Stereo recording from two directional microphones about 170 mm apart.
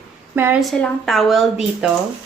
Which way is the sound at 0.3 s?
15° right (ahead or behind).